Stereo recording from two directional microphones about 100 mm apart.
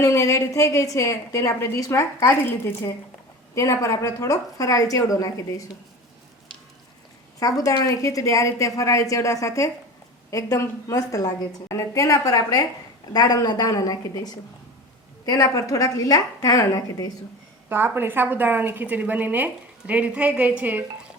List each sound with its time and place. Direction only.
0.0 s a woman's voice: 35° left (ahead or behind)
7.3 s a woman's voice: 35° left (ahead or behind)
17.7 s a woman's voice: 20° right (ahead or behind)